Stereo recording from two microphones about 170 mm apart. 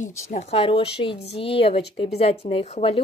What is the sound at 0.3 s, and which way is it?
Speech, 40° left (ahead or behind).